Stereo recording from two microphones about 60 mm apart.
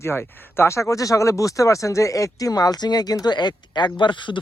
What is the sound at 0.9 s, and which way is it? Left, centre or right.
Speech, left.